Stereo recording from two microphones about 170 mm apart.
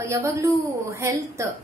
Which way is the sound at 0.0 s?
15° right (ahead or behind).